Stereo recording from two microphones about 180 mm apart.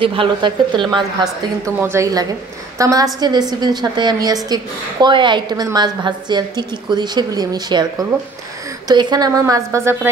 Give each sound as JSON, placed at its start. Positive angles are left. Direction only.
{"t": 0.0, "sound": "a woman's voice", "side_deg": -30}